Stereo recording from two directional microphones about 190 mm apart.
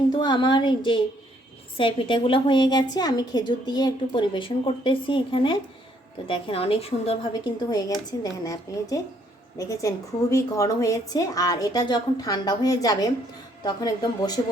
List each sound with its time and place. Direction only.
0.1 s a woman's voice: 25° left (ahead or behind)
7.7 s a woman's voice: 20° left (ahead or behind)